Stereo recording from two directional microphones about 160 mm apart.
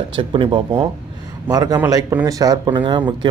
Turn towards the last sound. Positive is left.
turn(degrees=-30)  # may be behind; listen again after turning